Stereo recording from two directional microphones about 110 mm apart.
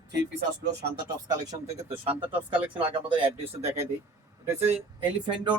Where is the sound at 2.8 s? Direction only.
50° right (ahead or behind).